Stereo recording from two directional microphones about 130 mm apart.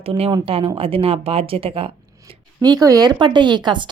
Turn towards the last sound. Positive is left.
turn(degrees=-35)  # may be behind; listen again after turning